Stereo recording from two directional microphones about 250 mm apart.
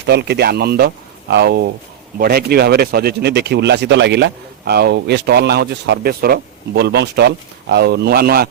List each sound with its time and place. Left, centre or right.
0.0 s speech: right